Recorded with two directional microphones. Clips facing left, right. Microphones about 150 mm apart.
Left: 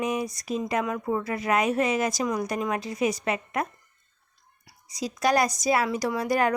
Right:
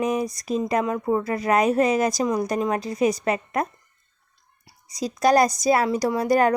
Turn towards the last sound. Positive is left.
turn(degrees=-40)  # may be behind; listen again after turning